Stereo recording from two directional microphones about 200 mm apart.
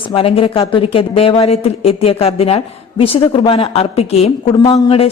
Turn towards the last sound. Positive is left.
turn(degrees=20)  # may be behind; listen again after turning